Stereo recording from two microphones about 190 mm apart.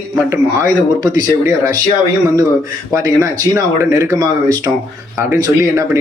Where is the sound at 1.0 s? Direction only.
20° right (ahead or behind).